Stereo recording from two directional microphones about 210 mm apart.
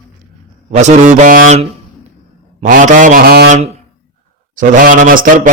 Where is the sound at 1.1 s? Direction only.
40° right (ahead or behind).